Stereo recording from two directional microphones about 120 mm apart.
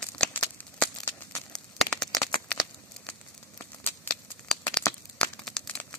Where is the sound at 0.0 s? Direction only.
5° left (ahead or behind).